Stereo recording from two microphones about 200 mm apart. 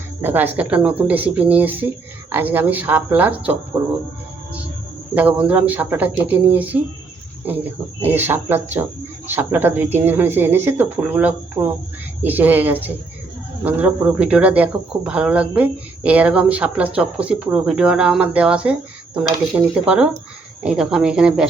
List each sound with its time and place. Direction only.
0.2 s speech: 10° right (ahead or behind)
5.1 s speech: 5° right (ahead or behind)
8.0 s speech: 10° right (ahead or behind)